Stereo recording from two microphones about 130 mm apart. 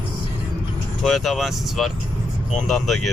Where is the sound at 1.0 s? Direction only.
Centre (ahead or behind).